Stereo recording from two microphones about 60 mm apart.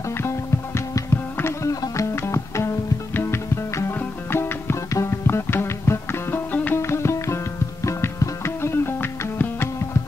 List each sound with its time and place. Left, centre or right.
0.2 s music: left
1.7 s music: left
2.1 s music: left